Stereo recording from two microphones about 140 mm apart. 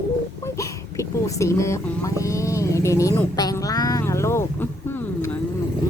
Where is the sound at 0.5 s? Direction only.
20° left (ahead or behind).